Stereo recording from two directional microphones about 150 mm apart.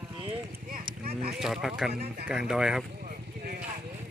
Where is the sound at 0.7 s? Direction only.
80° right.